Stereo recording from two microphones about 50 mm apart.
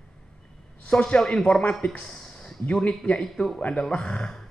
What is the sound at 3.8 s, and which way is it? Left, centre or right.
Speech, centre.